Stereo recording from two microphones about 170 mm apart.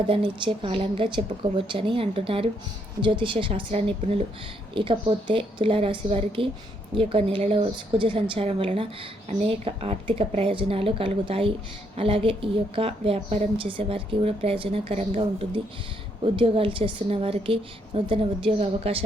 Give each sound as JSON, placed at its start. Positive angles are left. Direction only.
{"t": 0.1, "sound": "a woman's voice", "side_deg": -30}